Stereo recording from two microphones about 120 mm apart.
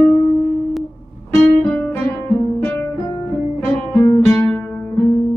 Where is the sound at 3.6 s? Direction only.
20° left (ahead or behind).